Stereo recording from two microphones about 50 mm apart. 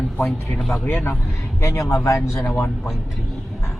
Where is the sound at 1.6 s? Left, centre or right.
Left.